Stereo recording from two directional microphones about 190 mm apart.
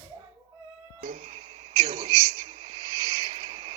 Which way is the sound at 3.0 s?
20° right (ahead or behind).